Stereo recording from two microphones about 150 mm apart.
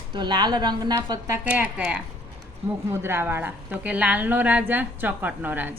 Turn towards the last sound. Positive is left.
turn(degrees=-10)  # may be behind; listen again after turning